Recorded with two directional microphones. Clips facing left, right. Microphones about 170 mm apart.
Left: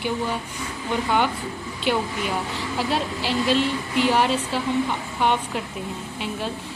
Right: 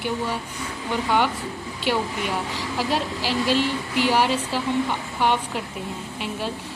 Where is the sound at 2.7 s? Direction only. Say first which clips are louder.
Even; 5° right (ahead or behind).